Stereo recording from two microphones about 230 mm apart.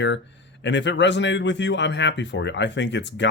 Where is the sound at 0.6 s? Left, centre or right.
Left.